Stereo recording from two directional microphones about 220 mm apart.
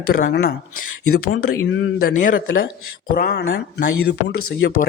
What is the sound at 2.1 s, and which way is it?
Speech, 35° left (ahead or behind).